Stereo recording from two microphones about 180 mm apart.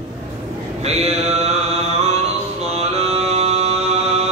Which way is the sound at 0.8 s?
35° right (ahead or behind).